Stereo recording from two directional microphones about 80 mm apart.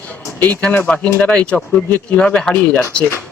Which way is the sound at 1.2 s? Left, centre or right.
Centre.